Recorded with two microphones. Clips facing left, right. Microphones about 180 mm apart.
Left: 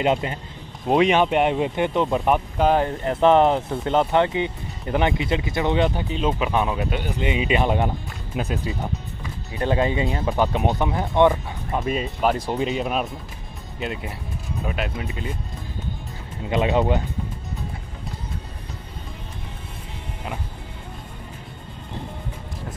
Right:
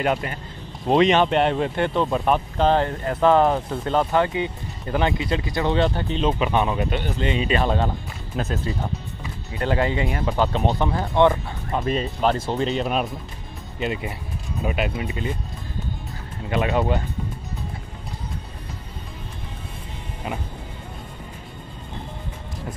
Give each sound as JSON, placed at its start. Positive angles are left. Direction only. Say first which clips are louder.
{"t": 0.0, "sound": "speech", "louder": "left 2 dB", "side_deg": 20}
{"t": 0.8, "sound": "speech", "louder": "right 1 dB", "side_deg": 10}
{"t": 3.0, "sound": "speech", "louder": "left 3 dB", "side_deg": 20}
{"t": 5.9, "sound": "speech", "louder": "right 1 dB", "side_deg": 5}
{"t": 16.4, "sound": "speech", "louder": "left 2 dB", "side_deg": 20}